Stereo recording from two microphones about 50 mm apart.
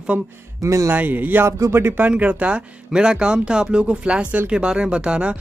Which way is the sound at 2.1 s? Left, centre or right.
Right.